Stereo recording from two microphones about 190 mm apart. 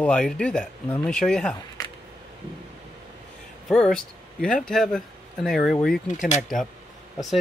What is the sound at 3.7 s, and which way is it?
Speech, centre (ahead or behind).